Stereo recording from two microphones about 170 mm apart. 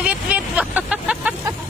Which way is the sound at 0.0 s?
10° right (ahead or behind).